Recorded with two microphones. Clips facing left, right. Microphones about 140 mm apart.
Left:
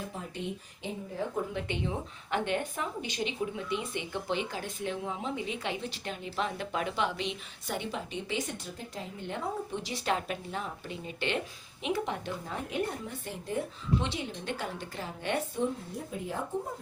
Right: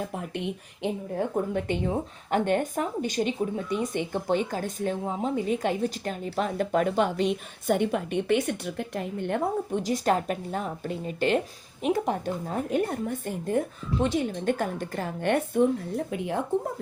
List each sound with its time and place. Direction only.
0.2 s speech: 65° right (ahead or behind)
16.0 s speech: 70° right (ahead or behind)